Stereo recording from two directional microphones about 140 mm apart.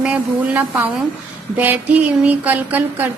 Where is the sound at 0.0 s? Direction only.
10° right (ahead or behind).